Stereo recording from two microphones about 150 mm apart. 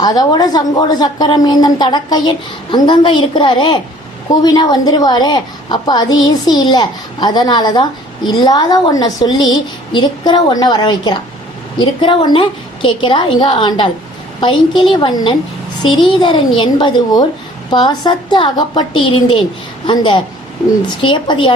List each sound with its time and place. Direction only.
0.0 s a woman's voice: 25° left (ahead or behind)